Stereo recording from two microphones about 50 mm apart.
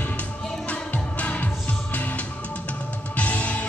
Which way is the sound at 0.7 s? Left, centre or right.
Left.